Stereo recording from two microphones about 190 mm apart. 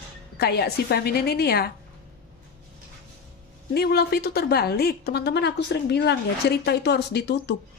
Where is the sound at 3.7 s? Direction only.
55° left (ahead or behind).